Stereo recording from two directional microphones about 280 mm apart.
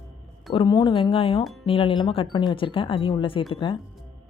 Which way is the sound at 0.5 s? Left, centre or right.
Centre.